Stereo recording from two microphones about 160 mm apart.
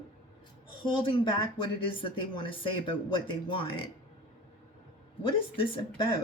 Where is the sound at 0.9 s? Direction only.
30° left (ahead or behind).